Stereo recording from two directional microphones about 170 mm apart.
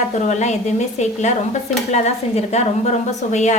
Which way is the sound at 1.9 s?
40° left (ahead or behind).